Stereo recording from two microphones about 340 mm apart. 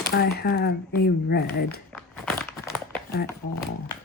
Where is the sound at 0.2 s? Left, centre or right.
Left.